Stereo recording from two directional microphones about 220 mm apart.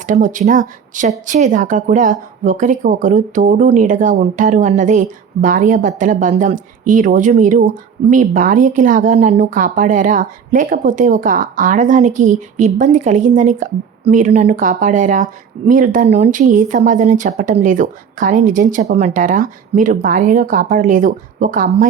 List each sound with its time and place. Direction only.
0.1 s speech: 35° right (ahead or behind)